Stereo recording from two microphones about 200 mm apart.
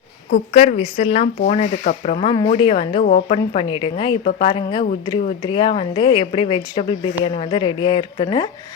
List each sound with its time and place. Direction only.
0.5 s a woman's voice: 35° left (ahead or behind)
2.1 s a woman's voice: 25° left (ahead or behind)
3.0 s a woman's voice: 40° left (ahead or behind)